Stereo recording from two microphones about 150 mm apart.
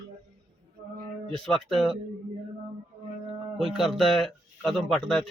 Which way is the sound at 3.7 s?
Centre (ahead or behind).